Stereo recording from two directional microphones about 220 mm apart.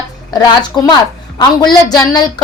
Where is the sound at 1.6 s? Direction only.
20° left (ahead or behind).